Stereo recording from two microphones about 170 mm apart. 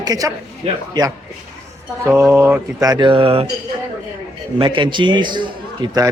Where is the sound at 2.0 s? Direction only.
15° right (ahead or behind); by 3.5 s 35° right (ahead or behind).